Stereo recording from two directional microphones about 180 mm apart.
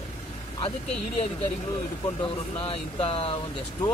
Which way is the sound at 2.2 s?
30° left (ahead or behind).